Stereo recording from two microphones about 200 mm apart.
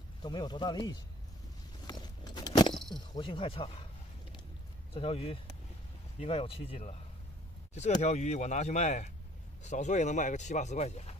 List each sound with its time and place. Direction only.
0.2 s speech: 20° left (ahead or behind)
1.9 s a sound: 20° left (ahead or behind)
3.0 s speech: 25° left (ahead or behind)
4.9 s speech: 30° left (ahead or behind)
8.0 s speech: 35° left (ahead or behind)